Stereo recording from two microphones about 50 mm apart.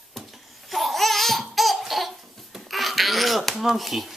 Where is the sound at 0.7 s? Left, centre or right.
Centre.